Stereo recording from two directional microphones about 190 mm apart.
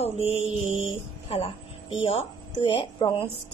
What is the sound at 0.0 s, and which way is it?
Mantra, 30° left (ahead or behind).